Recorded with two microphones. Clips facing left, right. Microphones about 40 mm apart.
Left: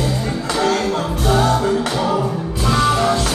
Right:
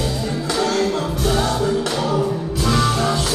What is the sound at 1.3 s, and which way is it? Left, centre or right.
Music, left.